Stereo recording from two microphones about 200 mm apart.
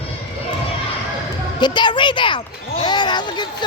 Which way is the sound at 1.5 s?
20° left (ahead or behind).